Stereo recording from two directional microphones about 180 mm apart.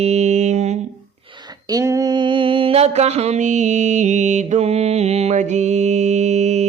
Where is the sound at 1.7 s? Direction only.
20° right (ahead or behind).